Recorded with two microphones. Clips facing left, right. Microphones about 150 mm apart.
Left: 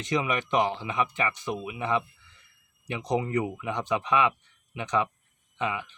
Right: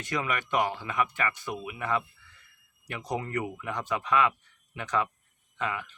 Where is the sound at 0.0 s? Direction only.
20° left (ahead or behind).